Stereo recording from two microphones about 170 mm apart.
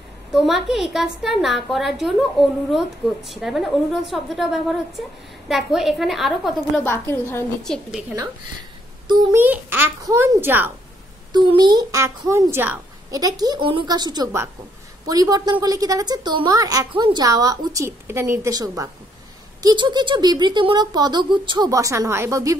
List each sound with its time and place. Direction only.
0.3 s a woman's voice: centre (ahead or behind)
7.1 s a woman's voice: 15° left (ahead or behind)
7.6 s a woman's voice: 5° left (ahead or behind)
9.0 s a child's voice: 25° right (ahead or behind)
9.4 s a child's voice: 10° right (ahead or behind)
11.3 s a woman's voice: 25° right (ahead or behind)